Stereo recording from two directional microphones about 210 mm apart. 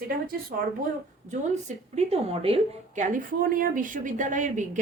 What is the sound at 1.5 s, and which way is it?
A woman's voice, 30° right (ahead or behind).